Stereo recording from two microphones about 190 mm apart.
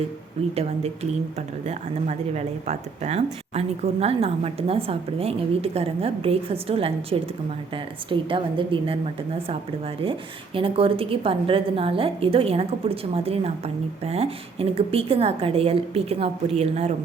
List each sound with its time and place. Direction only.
0.5 s a woman's voice: 35° right (ahead or behind)
10.0 s a woman's voice: 30° right (ahead or behind)